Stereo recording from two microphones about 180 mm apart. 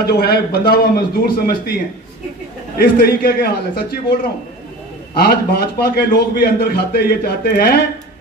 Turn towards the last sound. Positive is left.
turn(degrees=60)  # may be behind; listen again after turning